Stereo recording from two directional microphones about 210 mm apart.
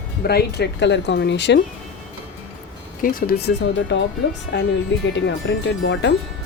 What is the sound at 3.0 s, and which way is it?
Speech, 45° left (ahead or behind).